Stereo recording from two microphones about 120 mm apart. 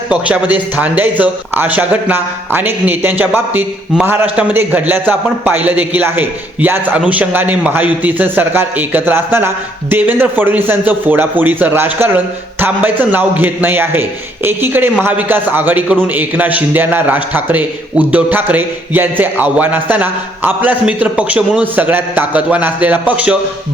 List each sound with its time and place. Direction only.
0.1 s a man's voice: 10° right (ahead or behind)